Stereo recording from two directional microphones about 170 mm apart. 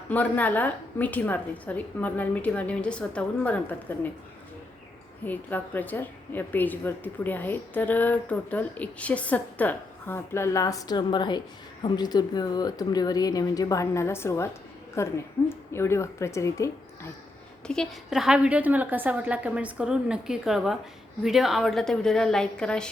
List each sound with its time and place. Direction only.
0.1 s a woman's voice: 10° left (ahead or behind)
5.2 s a woman's voice: 10° left (ahead or behind)
17.7 s a woman's voice: centre (ahead or behind)